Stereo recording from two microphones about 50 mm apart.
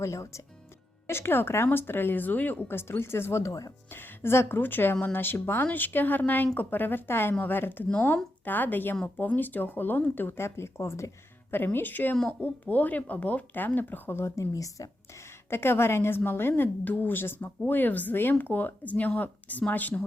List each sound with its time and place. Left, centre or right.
0.0 s speech: left
1.0 s speech: left
2.6 s a woman's voice: left
10.2 s speech: left
11.5 s speech: left
14.2 s speech: left
15.4 s speech: left
16.8 s speech: left
17.1 s speech: left